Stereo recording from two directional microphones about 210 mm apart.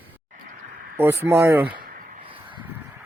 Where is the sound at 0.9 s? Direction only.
10° right (ahead or behind).